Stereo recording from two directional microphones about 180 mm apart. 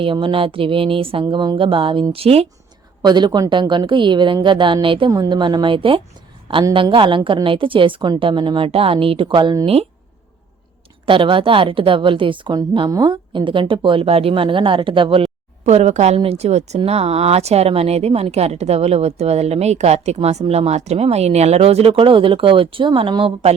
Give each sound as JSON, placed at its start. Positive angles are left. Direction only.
{"t": 0.0, "sound": "a woman's voice", "side_deg": -30}
{"t": 3.0, "sound": "a woman's voice", "side_deg": -25}
{"t": 11.0, "sound": "a woman's voice", "side_deg": -30}